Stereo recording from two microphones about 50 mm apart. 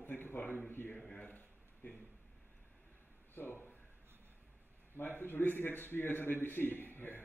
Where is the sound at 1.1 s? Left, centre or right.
Left.